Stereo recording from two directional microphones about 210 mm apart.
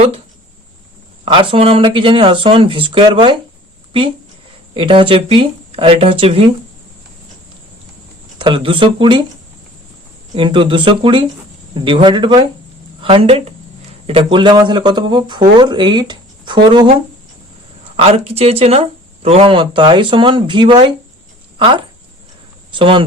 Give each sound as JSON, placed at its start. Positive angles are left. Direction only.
{"t": 1.2, "sound": "speech", "side_deg": -25}
{"t": 4.7, "sound": "speech", "side_deg": -25}
{"t": 8.4, "sound": "speech", "side_deg": -25}
{"t": 10.3, "sound": "speech", "side_deg": -25}
{"t": 17.9, "sound": "speech", "side_deg": -30}
{"t": 22.7, "sound": "speech", "side_deg": -25}